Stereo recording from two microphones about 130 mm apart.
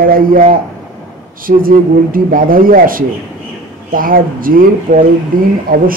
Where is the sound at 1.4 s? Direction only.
90° right.